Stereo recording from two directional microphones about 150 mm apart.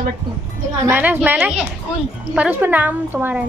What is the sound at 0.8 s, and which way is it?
A woman's voice, 15° right (ahead or behind).